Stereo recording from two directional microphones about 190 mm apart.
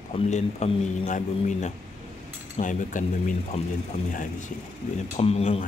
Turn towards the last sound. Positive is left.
turn(degrees=35)  # may be behind; listen again after turning